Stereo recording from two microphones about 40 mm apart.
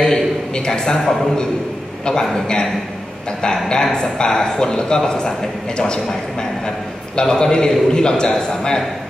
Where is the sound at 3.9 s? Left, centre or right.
Centre.